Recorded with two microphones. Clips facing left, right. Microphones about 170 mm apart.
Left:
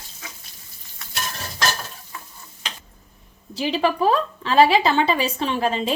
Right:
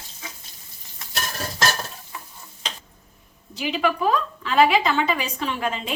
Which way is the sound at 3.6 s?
35° left (ahead or behind).